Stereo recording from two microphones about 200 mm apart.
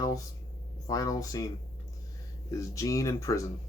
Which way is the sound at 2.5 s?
15° left (ahead or behind).